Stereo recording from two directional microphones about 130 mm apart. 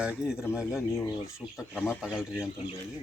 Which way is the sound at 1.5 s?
15° left (ahead or behind).